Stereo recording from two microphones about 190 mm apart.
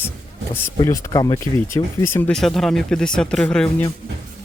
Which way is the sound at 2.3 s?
Centre (ahead or behind).